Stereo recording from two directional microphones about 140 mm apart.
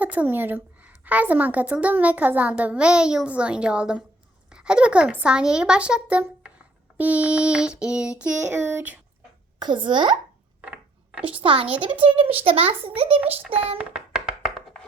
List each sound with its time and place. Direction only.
0.0 s a woman's voice: 10° right (ahead or behind)
9.6 s a child's voice: 35° right (ahead or behind)
10.6 s mechanisms: 10° right (ahead or behind)
11.3 s a child's voice: 40° right (ahead or behind)
13.2 s a woman's voice: 10° right (ahead or behind)
13.7 s music: 5° right (ahead or behind)